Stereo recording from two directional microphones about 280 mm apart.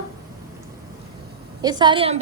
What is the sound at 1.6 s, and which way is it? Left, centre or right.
Speech, centre.